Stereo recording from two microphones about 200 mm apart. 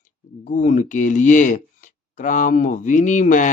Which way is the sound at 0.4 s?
40° left (ahead or behind).